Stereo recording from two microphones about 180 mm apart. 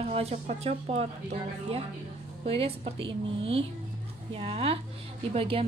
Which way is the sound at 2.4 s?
30° right (ahead or behind).